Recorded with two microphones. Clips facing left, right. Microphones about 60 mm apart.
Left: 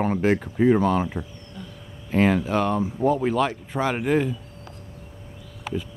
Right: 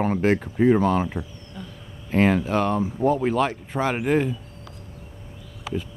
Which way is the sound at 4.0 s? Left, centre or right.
Centre.